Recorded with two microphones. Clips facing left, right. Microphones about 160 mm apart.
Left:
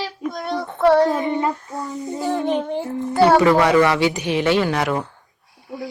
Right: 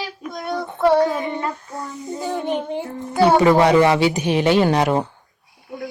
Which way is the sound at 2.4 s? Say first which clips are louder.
Left 1 dB; 15° right (ahead or behind).